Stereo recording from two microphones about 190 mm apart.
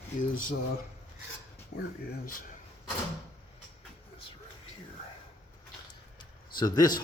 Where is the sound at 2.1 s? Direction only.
50° left (ahead or behind).